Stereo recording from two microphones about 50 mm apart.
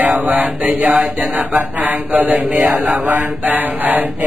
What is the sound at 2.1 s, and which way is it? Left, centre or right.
Mantra, right.